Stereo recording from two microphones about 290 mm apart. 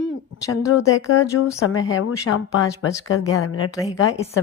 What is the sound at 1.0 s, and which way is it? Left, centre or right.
Speech, left.